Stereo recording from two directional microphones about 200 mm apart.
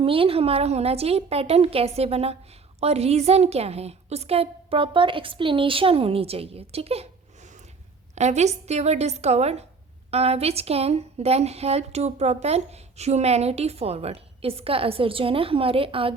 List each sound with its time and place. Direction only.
0.0 s a woman's voice: 30° right (ahead or behind)